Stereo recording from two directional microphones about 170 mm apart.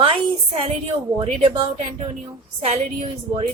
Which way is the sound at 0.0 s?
35° right (ahead or behind).